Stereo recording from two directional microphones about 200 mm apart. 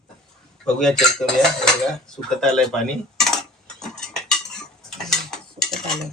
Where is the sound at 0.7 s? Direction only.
5° left (ahead or behind).